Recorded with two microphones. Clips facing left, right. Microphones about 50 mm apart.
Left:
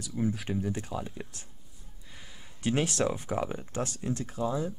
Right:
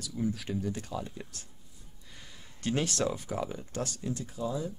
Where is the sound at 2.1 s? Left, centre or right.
Centre; by 4.1 s left.